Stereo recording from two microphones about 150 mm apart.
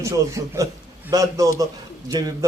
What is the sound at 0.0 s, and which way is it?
A man's voice, 20° right (ahead or behind).